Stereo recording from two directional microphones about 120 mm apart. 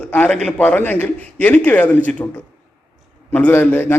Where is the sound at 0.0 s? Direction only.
10° left (ahead or behind).